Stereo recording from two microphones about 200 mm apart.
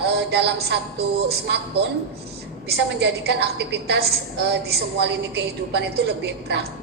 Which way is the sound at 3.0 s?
55° right (ahead or behind).